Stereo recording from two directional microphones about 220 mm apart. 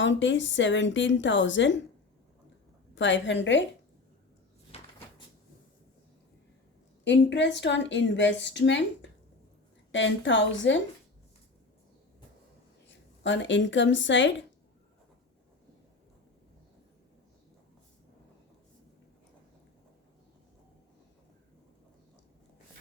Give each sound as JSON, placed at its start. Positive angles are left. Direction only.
{"t": 0.0, "sound": "a woman's voice", "side_deg": 55}
{"t": 2.9, "sound": "a woman's voice", "side_deg": 55}
{"t": 4.7, "sound": "cupboard open or close", "side_deg": 25}
{"t": 7.0, "sound": "a woman's voice", "side_deg": 55}
{"t": 13.2, "sound": "a woman's voice", "side_deg": 55}